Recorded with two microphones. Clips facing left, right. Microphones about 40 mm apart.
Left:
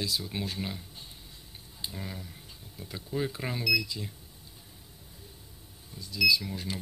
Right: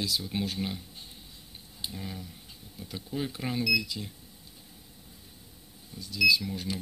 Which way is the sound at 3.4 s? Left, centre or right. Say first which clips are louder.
Right 3 dB; centre.